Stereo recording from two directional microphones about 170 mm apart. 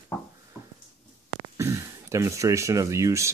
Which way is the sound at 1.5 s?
15° right (ahead or behind).